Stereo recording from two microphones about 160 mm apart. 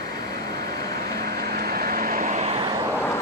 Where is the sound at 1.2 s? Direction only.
70° right (ahead or behind); by 2.6 s 45° right (ahead or behind).